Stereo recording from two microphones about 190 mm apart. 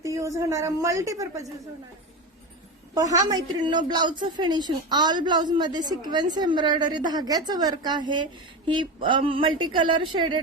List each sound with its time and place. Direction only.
0.0 s a woman's voice: 15° right (ahead or behind)
2.9 s a woman's voice: 20° right (ahead or behind)